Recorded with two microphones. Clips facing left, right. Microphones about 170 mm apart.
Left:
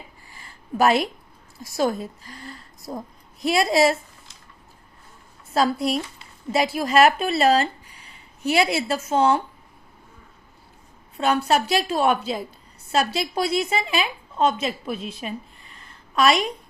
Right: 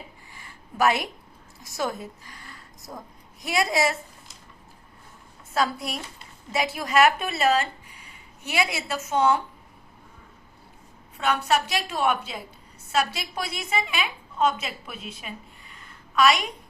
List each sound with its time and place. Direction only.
0.8 s a woman's voice: 30° left (ahead or behind)
5.5 s a woman's voice: 30° left (ahead or behind)
11.4 s a woman's voice: 30° left (ahead or behind)